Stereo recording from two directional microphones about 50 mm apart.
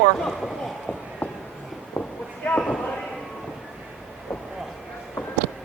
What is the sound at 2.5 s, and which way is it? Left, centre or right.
Speech, left.